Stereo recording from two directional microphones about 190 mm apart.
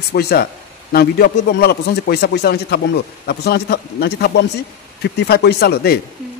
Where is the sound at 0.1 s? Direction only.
55° left (ahead or behind).